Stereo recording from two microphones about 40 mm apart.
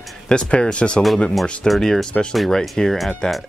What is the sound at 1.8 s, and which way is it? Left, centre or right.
Speech, centre.